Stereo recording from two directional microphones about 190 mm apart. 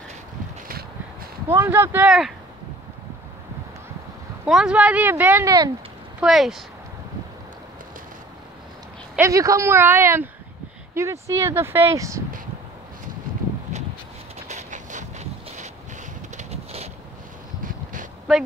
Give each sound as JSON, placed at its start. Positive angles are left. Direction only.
{"t": 1.5, "sound": "speech", "side_deg": -15}
{"t": 4.5, "sound": "speech", "side_deg": -5}
{"t": 6.2, "sound": "speech", "side_deg": 0}
{"t": 9.1, "sound": "speech", "side_deg": -15}
{"t": 14.5, "sound": "a sound", "side_deg": -40}